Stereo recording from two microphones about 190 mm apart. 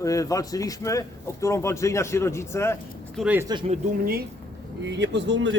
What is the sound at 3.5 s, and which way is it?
Speech, 25° right (ahead or behind).